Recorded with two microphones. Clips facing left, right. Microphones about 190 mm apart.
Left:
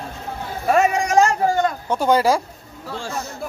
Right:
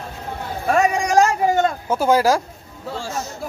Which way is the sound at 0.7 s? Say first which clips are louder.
Even; centre (ahead or behind).